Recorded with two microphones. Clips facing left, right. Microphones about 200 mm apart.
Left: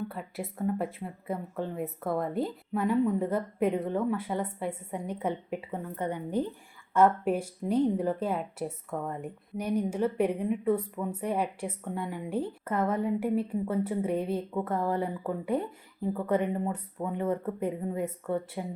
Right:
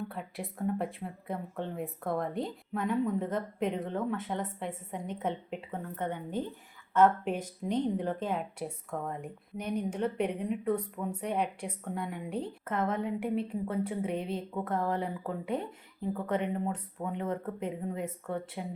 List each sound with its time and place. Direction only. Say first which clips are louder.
0.1 s speech: left 2 dB; centre (ahead or behind)
16.6 s speech: left 2 dB; 5° left (ahead or behind)